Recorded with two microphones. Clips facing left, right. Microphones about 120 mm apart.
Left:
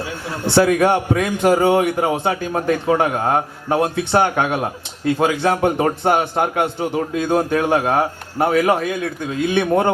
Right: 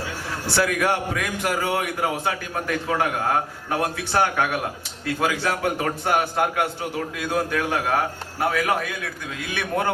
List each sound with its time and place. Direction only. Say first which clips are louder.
0.4 s a man's voice: left 8 dB; 25° left (ahead or behind)